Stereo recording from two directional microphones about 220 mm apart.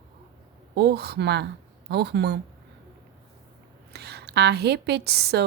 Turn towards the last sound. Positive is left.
turn(degrees=-50)  # may be behind; listen again after turning